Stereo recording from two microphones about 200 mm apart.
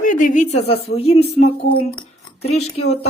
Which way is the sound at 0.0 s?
40° left (ahead or behind).